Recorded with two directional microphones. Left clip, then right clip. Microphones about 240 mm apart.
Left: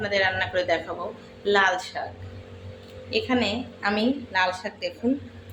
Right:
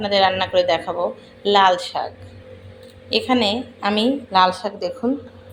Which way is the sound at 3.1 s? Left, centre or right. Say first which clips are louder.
Right 6 dB; right.